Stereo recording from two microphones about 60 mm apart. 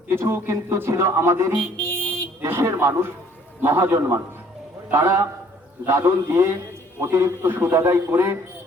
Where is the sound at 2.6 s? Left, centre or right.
Right.